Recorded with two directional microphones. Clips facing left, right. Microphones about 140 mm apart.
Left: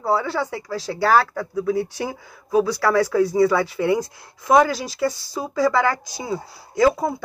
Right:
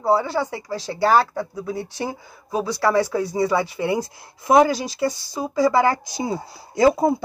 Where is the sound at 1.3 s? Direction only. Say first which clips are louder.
Left 5 dB; 20° right (ahead or behind).